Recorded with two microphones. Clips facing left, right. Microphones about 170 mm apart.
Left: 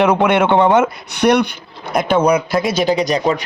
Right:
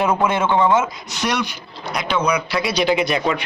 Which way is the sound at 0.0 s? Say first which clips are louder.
Left 5 dB; 75° left (ahead or behind).